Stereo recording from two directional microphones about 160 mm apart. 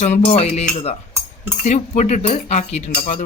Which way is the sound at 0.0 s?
45° left (ahead or behind).